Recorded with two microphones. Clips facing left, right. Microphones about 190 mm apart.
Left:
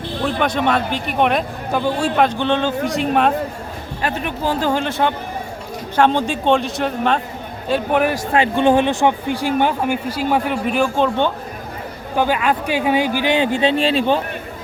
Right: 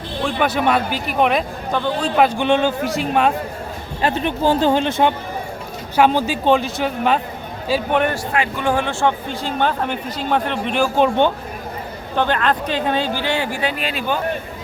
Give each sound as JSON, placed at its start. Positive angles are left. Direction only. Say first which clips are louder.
{"t": 0.3, "sound": "speech", "louder": "even", "side_deg": -5}
{"t": 2.1, "sound": "speech", "louder": "right 5 dB", "side_deg": -10}
{"t": 4.0, "sound": "speech", "louder": "right 4 dB", "side_deg": -25}
{"t": 6.0, "sound": "speech", "louder": "even", "side_deg": -5}
{"t": 8.3, "sound": "speech", "louder": "left 5 dB", "side_deg": 30}
{"t": 10.9, "sound": "a man's voice", "louder": "right 2 dB", "side_deg": -15}
{"t": 12.1, "sound": "speech", "louder": "left 1 dB", "side_deg": 10}